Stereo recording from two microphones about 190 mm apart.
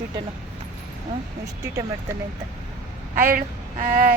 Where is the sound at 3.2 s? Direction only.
45° right (ahead or behind).